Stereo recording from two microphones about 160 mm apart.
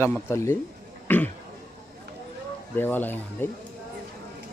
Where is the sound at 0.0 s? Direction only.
15° left (ahead or behind).